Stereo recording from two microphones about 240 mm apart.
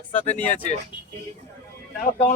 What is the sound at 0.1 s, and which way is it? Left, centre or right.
Speech, left.